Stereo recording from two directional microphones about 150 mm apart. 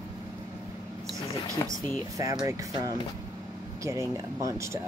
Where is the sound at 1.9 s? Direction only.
25° right (ahead or behind).